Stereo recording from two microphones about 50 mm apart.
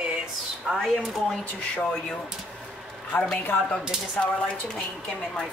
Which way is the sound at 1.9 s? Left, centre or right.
Centre.